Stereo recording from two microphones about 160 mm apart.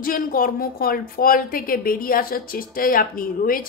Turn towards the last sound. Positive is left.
turn(degrees=60)  # may be behind; listen again after turning